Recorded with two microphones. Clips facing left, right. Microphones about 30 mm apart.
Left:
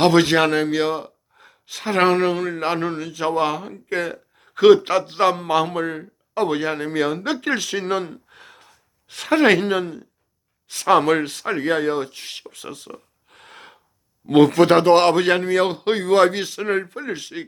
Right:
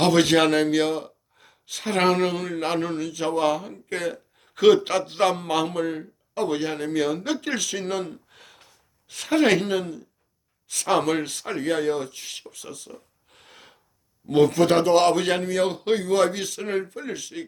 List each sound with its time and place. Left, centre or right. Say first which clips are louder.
0.0 s a man's voice: left 3 dB; left
6.3 s a man's voice: left 4 dB; left
8.1 s a sound: left 3 dB; centre
9.0 s speech: left 4 dB; left
9.4 s speech: left 4 dB; left
11.4 s speech: left 3 dB; left
14.3 s speech: left 5 dB; left
14.7 s a man's voice: left 4 dB; left